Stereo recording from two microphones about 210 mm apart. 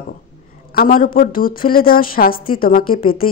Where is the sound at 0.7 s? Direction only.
40° left (ahead or behind).